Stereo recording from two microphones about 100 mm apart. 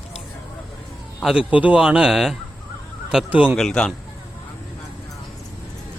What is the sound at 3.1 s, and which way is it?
Speech, 15° right (ahead or behind).